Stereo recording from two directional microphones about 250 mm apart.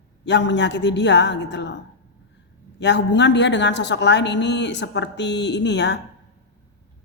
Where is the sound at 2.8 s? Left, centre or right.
Left.